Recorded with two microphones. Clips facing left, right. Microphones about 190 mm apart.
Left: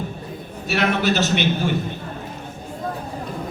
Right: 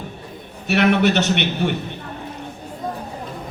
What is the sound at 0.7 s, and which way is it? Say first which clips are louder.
A man's voice: right 4 dB; 65° right (ahead or behind).